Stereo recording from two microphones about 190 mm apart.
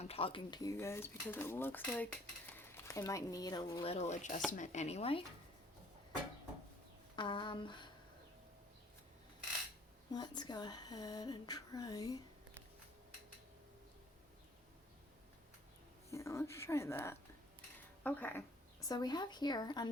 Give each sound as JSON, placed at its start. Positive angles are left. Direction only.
{"t": 0.0, "sound": "speech", "side_deg": 30}
{"t": 7.2, "sound": "speech", "side_deg": 25}
{"t": 10.1, "sound": "speech", "side_deg": 20}
{"t": 16.0, "sound": "speech", "side_deg": 15}